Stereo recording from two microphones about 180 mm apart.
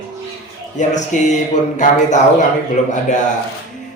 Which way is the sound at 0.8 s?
40° left (ahead or behind).